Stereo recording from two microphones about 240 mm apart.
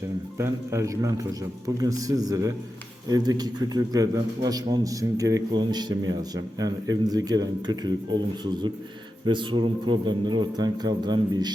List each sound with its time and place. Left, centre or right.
0.3 s a man's voice: centre